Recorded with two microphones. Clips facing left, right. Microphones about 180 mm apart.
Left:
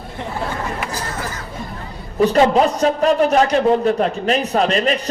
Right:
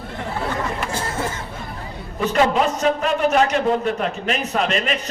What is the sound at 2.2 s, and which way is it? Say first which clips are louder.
A man's voice: left 5 dB; 35° left (ahead or behind).